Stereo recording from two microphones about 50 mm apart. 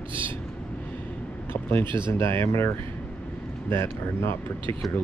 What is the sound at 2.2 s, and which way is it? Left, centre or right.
Speech, left.